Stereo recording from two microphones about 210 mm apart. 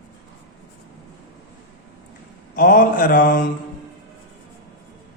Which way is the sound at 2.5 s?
40° left (ahead or behind).